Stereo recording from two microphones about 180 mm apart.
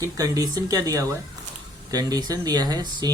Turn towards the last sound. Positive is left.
turn(degrees=-20)  # may be behind; listen again after turning